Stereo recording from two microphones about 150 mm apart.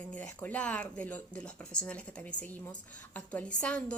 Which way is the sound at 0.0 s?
10° left (ahead or behind).